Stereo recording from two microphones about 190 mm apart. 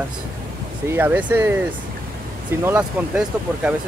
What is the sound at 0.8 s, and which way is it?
Speech, 10° right (ahead or behind).